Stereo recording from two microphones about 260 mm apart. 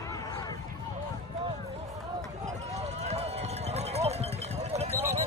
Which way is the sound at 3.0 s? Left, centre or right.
Right.